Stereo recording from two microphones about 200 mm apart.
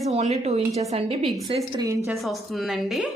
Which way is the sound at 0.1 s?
30° right (ahead or behind).